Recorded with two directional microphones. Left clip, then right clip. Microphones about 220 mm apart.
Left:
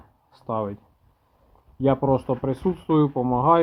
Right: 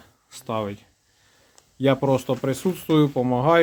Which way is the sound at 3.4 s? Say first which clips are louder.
Even; 10° right (ahead or behind).